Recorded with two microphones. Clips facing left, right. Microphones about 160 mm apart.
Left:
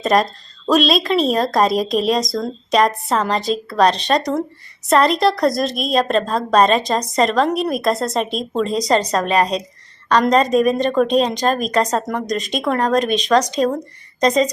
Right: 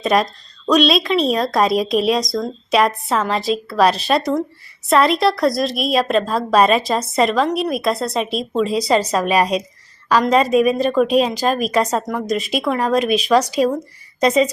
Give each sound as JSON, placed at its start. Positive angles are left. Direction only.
{"t": 0.0, "sound": "a woman's voice", "side_deg": 0}